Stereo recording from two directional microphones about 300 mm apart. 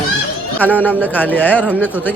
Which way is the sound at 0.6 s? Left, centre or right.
Centre.